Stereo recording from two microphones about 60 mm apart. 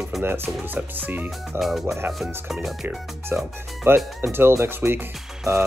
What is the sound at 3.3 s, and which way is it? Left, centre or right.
Speech, right.